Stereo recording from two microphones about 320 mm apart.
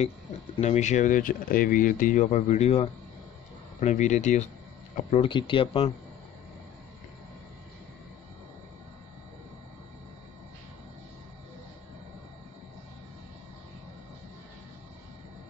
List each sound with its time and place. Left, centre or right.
0.6 s speech: left